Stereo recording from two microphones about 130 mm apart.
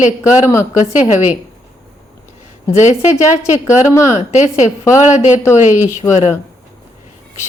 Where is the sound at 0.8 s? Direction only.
65° left (ahead or behind).